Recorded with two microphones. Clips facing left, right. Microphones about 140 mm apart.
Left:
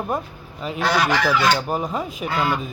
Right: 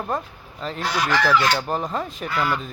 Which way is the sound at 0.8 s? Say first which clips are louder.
Left 5 dB; 60° left (ahead or behind).